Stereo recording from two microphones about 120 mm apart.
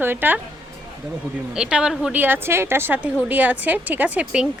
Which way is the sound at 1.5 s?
5° right (ahead or behind).